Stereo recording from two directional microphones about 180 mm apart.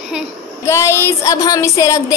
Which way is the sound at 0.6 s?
15° left (ahead or behind).